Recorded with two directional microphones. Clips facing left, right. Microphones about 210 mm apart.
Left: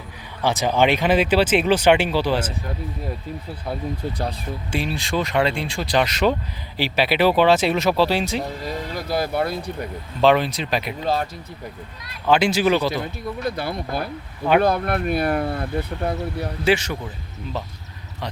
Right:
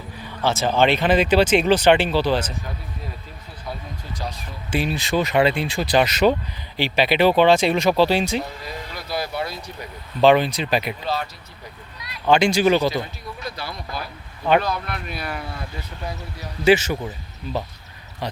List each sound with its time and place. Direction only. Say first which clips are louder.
0.4 s speech: even; 15° left (ahead or behind)
4.7 s speech: right 3 dB; centre (ahead or behind)
8.6 s speech: left 6 dB; 45° left (ahead or behind)
10.2 s speech: right 2 dB; centre (ahead or behind)
11.0 s speech: left 3 dB; 45° left (ahead or behind)
12.3 s speech: right 1 dB; 5° left (ahead or behind)
13.4 s speech: left 7 dB; 55° left (ahead or behind)
16.6 s speech: right 4 dB; 5° right (ahead or behind)